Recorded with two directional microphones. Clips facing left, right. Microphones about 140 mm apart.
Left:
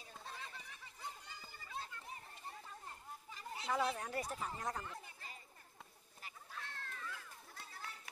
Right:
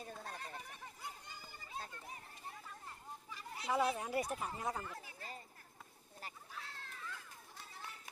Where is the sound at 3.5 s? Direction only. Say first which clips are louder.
Right 3 dB; centre (ahead or behind).